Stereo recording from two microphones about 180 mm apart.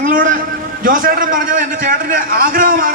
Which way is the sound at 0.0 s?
50° right (ahead or behind).